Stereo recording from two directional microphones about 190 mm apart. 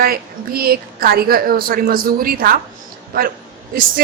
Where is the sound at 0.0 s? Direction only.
50° right (ahead or behind).